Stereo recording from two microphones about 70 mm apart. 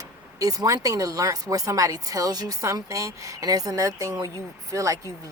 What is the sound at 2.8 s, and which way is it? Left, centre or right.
A woman's voice, right.